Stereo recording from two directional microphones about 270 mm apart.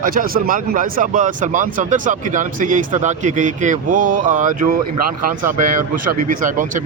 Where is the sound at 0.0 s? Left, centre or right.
Right.